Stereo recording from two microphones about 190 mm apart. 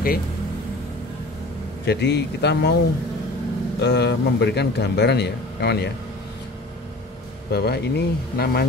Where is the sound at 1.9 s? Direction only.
60° left (ahead or behind).